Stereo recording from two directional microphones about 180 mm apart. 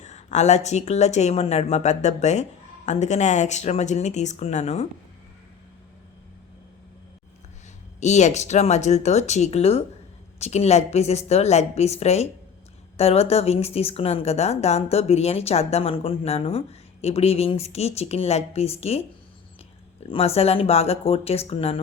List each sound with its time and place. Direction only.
0.0 s a woman's voice: 40° left (ahead or behind)
8.0 s a woman's voice: 40° left (ahead or behind)
20.1 s a woman's voice: 35° left (ahead or behind)